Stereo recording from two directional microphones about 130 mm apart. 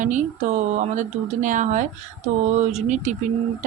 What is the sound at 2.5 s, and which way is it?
Speech, 60° right (ahead or behind).